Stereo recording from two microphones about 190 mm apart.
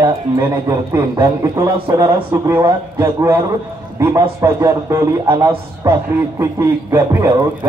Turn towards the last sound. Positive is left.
turn(degrees=-15)  # may be behind; listen again after turning